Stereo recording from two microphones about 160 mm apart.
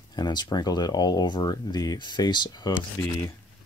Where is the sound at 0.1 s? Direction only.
25° left (ahead or behind).